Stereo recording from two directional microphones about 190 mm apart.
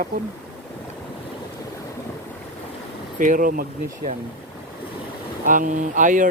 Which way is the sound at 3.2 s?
45° right (ahead or behind).